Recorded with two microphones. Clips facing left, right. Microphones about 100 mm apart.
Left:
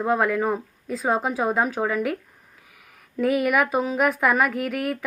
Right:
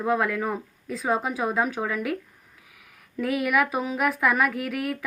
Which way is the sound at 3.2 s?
Centre (ahead or behind).